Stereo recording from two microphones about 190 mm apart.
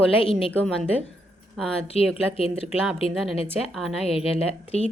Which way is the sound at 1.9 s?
30° left (ahead or behind).